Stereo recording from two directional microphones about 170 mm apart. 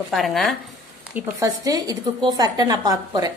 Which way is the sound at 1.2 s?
20° right (ahead or behind).